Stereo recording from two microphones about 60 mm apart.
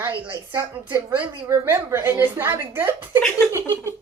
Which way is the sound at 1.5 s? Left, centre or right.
Right.